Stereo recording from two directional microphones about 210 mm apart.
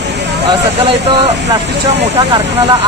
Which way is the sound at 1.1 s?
20° right (ahead or behind).